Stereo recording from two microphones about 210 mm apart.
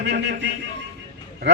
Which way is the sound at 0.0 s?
55° right (ahead or behind).